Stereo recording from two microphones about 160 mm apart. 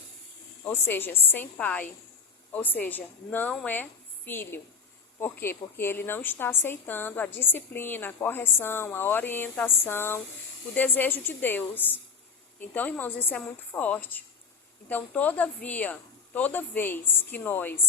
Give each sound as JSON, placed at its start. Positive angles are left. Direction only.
{"t": 0.6, "sound": "a woman's voice", "side_deg": 15}